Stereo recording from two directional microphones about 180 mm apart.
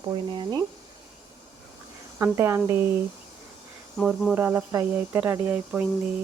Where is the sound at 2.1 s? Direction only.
15° right (ahead or behind).